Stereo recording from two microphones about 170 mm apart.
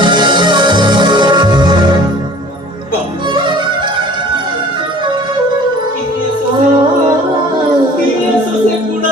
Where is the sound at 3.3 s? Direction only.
30° right (ahead or behind).